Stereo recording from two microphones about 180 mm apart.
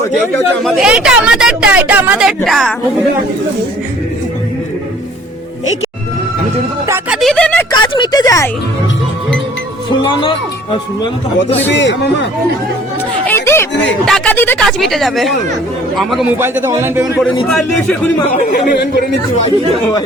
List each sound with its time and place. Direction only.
0.6 s speech: centre (ahead or behind)
6.8 s speech: 15° right (ahead or behind)
7.2 s speech: 5° left (ahead or behind)
7.7 s speech: 25° left (ahead or behind)
10.0 s speech: 25° left (ahead or behind)
11.7 s speech: 80° left
13.2 s a sound: 15° left (ahead or behind)
14.0 s speech: 5° left (ahead or behind)
16.4 s speech: 15° right (ahead or behind)
17.2 s speech: centre (ahead or behind)